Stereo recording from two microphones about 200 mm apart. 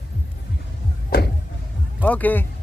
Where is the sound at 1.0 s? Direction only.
50° left (ahead or behind).